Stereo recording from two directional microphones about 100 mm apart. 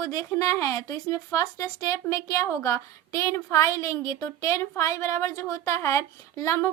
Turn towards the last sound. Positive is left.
turn(degrees=30)  # may be behind; listen again after turning